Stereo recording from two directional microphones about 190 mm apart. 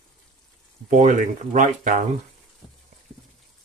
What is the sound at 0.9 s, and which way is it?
Speech, 40° right (ahead or behind).